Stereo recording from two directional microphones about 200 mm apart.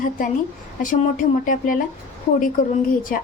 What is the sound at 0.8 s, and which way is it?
A woman's voice, 40° left (ahead or behind).